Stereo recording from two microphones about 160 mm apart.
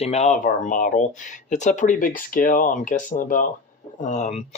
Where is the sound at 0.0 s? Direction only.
40° left (ahead or behind).